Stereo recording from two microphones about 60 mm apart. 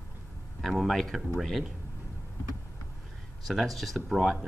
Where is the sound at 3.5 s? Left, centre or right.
Centre.